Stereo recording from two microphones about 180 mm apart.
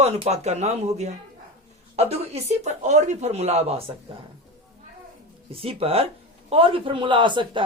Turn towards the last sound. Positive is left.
turn(degrees=-25)  # may be behind; listen again after turning